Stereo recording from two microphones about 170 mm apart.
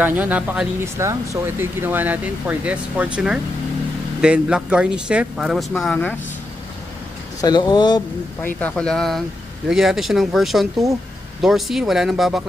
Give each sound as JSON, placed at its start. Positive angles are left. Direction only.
{"t": 0.0, "sound": "speech", "side_deg": -10}
{"t": 7.4, "sound": "speech", "side_deg": 25}
{"t": 8.4, "sound": "speech", "side_deg": 10}